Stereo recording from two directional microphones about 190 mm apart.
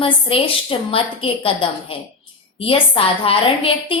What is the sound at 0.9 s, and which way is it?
A woman's voice, 30° left (ahead or behind).